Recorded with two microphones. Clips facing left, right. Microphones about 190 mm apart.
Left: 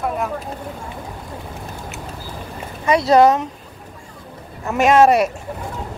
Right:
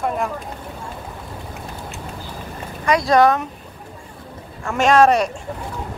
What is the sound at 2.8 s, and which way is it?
Speech, 25° left (ahead or behind).